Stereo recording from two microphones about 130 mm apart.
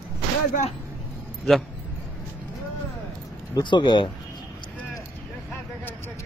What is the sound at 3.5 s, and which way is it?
Speech, 35° left (ahead or behind).